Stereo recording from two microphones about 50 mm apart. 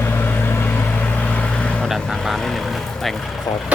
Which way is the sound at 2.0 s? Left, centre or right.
Centre.